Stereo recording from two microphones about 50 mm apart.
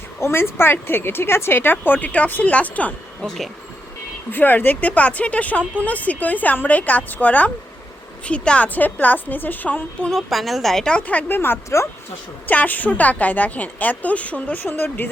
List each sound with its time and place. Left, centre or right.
0.2 s speech: left
3.2 s speech: centre
4.3 s a woman's voice: left
10.1 s speech: centre
11.0 s a woman's voice: left
11.3 s speech: left
12.5 s a woman's voice: left